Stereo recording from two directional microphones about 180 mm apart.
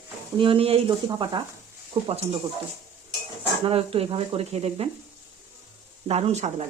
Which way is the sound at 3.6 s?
35° right (ahead or behind).